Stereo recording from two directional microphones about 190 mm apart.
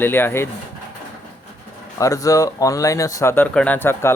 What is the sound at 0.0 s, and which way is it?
Speech, 10° left (ahead or behind).